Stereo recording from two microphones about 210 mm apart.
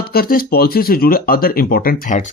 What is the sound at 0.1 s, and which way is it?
Speech, 45° left (ahead or behind).